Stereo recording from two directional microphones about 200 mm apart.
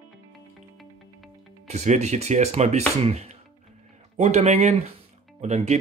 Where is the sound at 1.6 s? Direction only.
35° right (ahead or behind).